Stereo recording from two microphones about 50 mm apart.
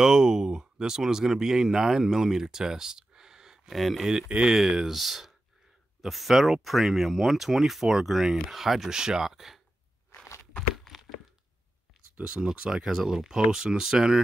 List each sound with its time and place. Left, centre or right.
0.0 s speech: centre
3.7 s speech: centre
4.3 s speech: centre
12.2 s speech: right